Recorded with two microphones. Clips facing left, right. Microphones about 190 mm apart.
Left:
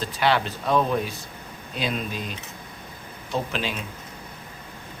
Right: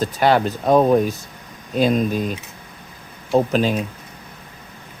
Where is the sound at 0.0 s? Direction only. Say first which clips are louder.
Right 6 dB; 45° right (ahead or behind).